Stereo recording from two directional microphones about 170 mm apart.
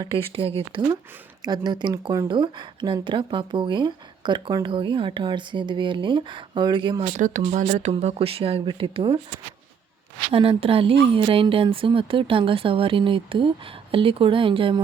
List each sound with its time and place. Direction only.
0.0 s speech: 30° right (ahead or behind)
7.1 s speech: 45° right (ahead or behind); by 9.2 s 30° right (ahead or behind)
10.3 s speech: 30° right (ahead or behind)